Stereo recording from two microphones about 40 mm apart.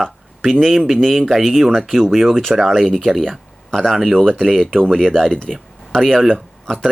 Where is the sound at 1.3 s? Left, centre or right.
Centre.